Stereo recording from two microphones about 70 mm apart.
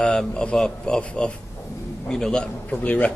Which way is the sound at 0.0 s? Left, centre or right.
Centre.